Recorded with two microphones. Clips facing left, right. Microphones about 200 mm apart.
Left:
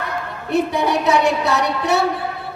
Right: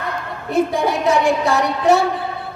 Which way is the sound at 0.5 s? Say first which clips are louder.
Even; 65° left (ahead or behind).